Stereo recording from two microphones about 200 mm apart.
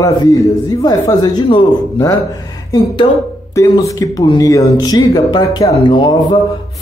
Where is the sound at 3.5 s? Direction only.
15° left (ahead or behind).